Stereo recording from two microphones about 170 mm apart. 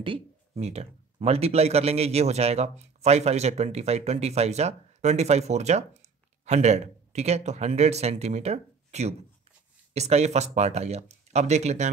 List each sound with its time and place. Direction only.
0.0 s speech: 35° right (ahead or behind)